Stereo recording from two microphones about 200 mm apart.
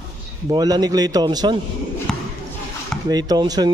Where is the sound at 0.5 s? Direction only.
20° right (ahead or behind).